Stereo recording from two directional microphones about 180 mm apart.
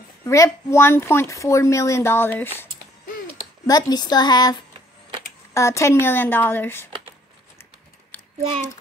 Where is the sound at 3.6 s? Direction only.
20° left (ahead or behind).